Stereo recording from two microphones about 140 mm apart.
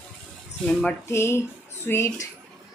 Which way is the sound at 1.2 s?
20° left (ahead or behind).